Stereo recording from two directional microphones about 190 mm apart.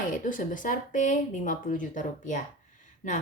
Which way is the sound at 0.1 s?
45° left (ahead or behind).